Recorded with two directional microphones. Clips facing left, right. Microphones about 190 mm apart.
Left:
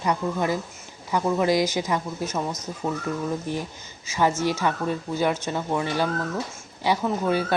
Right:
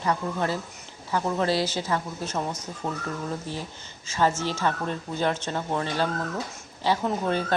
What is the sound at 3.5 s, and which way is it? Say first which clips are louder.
Speech: left 5 dB; 15° left (ahead or behind).